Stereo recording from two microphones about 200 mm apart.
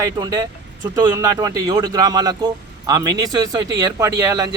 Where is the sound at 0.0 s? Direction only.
20° right (ahead or behind).